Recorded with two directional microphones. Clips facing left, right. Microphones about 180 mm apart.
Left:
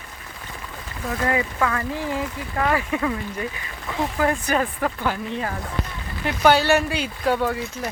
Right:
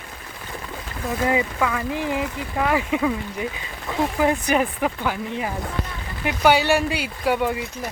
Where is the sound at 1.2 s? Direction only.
15° right (ahead or behind).